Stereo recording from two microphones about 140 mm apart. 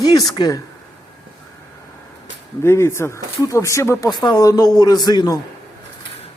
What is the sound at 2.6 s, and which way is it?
Speech, 20° left (ahead or behind).